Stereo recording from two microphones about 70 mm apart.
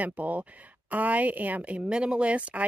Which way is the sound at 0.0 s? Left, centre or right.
Right.